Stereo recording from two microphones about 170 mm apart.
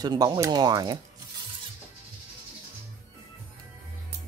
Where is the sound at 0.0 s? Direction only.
25° right (ahead or behind).